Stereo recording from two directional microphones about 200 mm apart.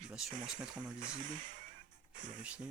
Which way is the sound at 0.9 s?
40° right (ahead or behind).